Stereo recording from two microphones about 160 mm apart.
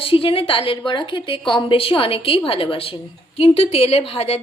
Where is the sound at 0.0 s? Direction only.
35° left (ahead or behind).